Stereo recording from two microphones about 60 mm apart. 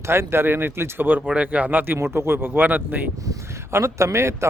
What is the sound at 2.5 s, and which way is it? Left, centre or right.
Speech, right.